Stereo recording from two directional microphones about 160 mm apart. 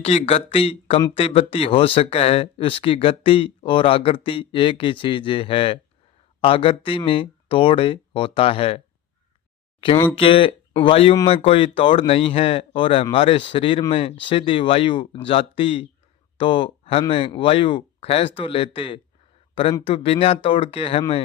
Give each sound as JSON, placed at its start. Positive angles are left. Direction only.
{"t": 0.0, "sound": "speech", "side_deg": 40}
{"t": 9.8, "sound": "speech", "side_deg": 30}